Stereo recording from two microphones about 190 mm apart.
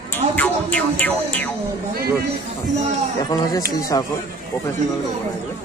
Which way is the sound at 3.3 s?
20° left (ahead or behind).